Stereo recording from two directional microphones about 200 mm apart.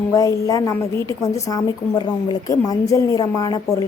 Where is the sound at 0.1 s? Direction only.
15° left (ahead or behind).